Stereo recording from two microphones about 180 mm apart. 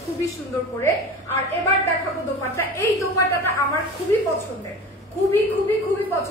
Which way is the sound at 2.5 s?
15° left (ahead or behind).